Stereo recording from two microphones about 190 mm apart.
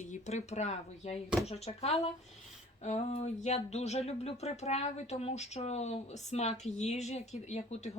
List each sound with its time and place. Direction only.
0.0 s speech: 40° left (ahead or behind)